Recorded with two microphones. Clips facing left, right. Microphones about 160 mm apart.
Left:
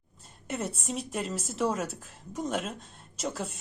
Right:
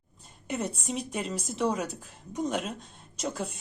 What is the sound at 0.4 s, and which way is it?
A woman's voice, centre (ahead or behind).